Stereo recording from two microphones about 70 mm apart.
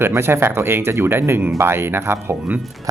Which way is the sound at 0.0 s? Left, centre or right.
Right.